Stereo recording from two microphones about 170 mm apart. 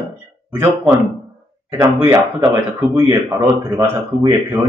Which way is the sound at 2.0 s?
15° right (ahead or behind).